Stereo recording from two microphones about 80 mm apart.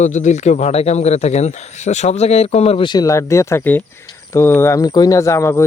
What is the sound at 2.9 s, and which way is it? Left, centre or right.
Speech, left.